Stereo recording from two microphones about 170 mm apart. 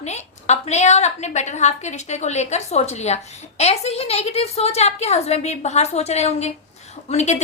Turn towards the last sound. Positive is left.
turn(degrees=40)  # may be behind; listen again after turning